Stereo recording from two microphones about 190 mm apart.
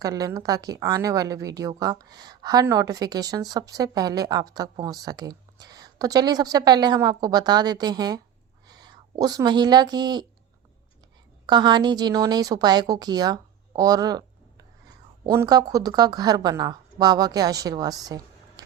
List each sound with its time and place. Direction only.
0.0 s speech: 20° right (ahead or behind)
11.4 s speech: 25° right (ahead or behind)
15.3 s speech: 15° right (ahead or behind)